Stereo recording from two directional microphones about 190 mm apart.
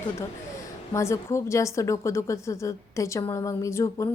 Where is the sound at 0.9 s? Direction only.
15° left (ahead or behind).